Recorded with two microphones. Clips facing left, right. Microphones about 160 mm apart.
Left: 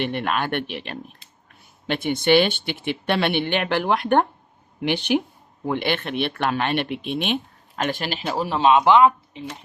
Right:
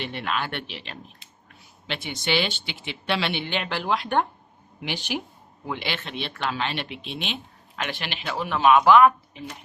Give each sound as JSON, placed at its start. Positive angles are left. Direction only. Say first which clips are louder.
{"t": 0.0, "sound": "speech", "louder": "left 5 dB", "side_deg": 55}